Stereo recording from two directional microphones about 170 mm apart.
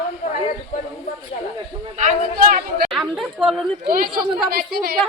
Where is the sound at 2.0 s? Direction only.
45° right (ahead or behind).